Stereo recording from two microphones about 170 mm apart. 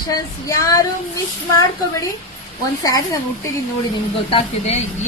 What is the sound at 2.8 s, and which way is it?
Speech, 20° left (ahead or behind).